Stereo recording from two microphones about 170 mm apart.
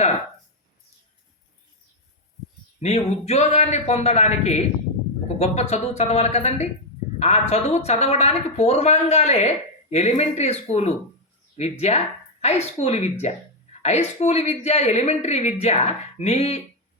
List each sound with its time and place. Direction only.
2.8 s speech: 40° left (ahead or behind)